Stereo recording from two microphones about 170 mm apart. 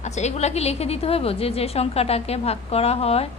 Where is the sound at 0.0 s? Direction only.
40° left (ahead or behind).